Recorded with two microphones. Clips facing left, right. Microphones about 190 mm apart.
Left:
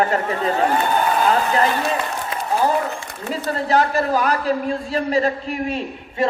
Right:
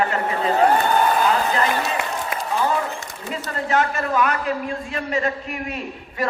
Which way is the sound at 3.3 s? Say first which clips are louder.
Left 4 dB; 35° left (ahead or behind).